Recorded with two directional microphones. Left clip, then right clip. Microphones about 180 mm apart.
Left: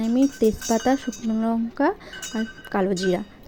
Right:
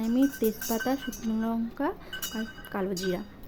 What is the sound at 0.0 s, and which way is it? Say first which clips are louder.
Speech: left 6 dB; 25° left (ahead or behind).